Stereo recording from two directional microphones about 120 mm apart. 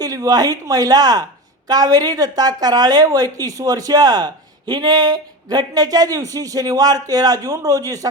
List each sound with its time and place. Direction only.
0.0 s a woman's voice: 30° right (ahead or behind)